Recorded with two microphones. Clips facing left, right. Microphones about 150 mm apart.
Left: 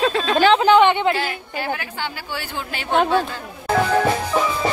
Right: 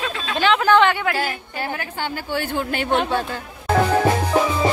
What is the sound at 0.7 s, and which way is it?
Speech, 20° left (ahead or behind).